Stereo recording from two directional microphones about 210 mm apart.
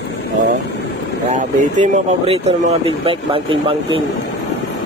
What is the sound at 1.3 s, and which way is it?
Speech, 35° right (ahead or behind).